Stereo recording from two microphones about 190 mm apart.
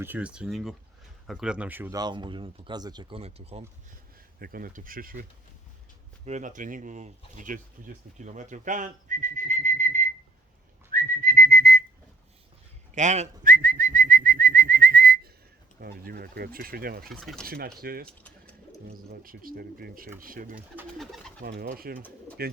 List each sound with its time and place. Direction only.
0.0 s speech: 10° right (ahead or behind)
2.0 s speech: 25° right (ahead or behind)
4.4 s speech: 50° right (ahead or behind)
6.2 s speech: 40° right (ahead or behind)
10.9 s whistling: 50° right (ahead or behind)
12.9 s speech: 40° right (ahead or behind)
17.1 s speech: centre (ahead or behind)
17.4 s speech: 50° right (ahead or behind)
18.2 s bird: 5° left (ahead or behind)
19.2 s speech: 50° right (ahead or behind)
20.6 s speech: 5° right (ahead or behind)
21.4 s speech: 55° right (ahead or behind)